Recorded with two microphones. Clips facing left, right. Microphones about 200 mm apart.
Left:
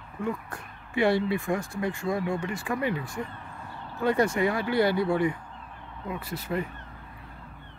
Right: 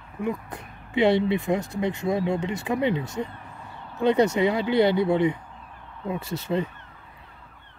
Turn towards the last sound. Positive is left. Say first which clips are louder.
# right 4 dB
turn(degrees=-25)  # may be behind; listen again after turning